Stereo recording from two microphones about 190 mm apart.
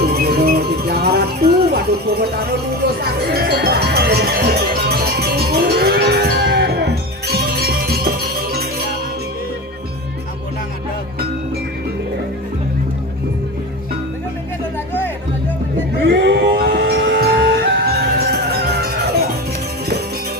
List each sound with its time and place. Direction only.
0.0 s music: 55° right (ahead or behind)
16.0 s music: 60° right (ahead or behind)